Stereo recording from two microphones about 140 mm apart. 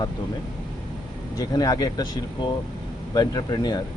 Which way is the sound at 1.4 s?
25° left (ahead or behind).